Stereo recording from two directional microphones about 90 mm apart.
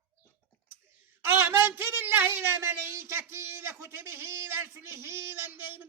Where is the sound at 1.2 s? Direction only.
25° right (ahead or behind).